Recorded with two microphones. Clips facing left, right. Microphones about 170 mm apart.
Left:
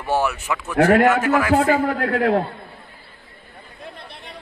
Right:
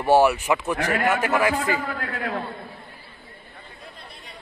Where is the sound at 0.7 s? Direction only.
65° left (ahead or behind).